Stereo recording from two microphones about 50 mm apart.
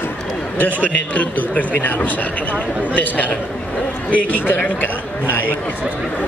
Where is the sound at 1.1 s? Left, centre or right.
Left.